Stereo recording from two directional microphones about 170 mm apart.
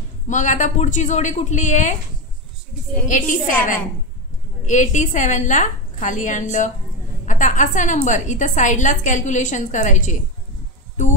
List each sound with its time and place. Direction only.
0.3 s a woman's voice: 45° left (ahead or behind)
3.1 s a woman's voice: 50° left (ahead or behind)
4.6 s a woman's voice: 45° left (ahead or behind)